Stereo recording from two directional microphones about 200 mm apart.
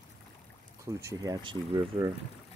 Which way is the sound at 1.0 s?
15° right (ahead or behind).